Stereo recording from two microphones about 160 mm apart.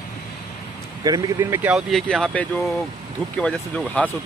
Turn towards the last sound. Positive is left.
turn(degrees=5)  # may be behind; listen again after turning